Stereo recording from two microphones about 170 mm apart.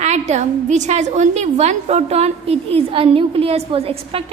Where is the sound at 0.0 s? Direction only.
40° right (ahead or behind).